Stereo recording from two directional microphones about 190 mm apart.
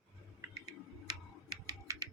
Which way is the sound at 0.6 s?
20° right (ahead or behind).